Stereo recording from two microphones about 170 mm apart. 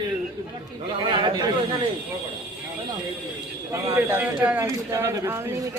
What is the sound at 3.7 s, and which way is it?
A man's voice, 15° right (ahead or behind).